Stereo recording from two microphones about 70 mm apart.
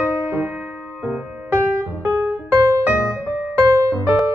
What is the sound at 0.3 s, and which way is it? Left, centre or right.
Music, right.